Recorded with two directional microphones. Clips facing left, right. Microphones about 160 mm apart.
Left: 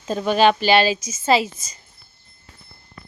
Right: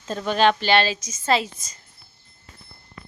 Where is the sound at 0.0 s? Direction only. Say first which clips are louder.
Left 3 dB; 10° left (ahead or behind).